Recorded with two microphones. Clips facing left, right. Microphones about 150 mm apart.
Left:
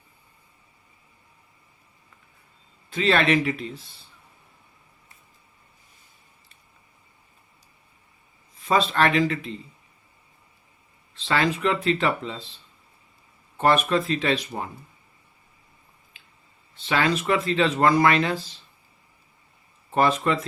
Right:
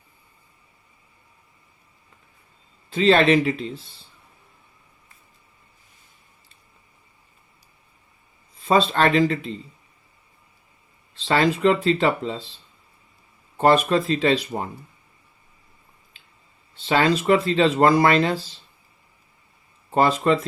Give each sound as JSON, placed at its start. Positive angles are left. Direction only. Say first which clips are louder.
{"t": 2.9, "sound": "speech", "louder": "right 5 dB", "side_deg": -30}
{"t": 8.6, "sound": "speech", "louder": "right 3 dB", "side_deg": -30}
{"t": 11.1, "sound": "speech", "louder": "right 4 dB", "side_deg": -35}
{"t": 13.6, "sound": "speech", "louder": "right 3 dB", "side_deg": -30}
{"t": 16.7, "sound": "speech", "louder": "right 4 dB", "side_deg": -30}
{"t": 19.9, "sound": "speech", "louder": "right 3 dB", "side_deg": -35}